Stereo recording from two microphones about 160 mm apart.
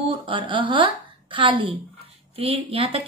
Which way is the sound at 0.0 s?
35° right (ahead or behind).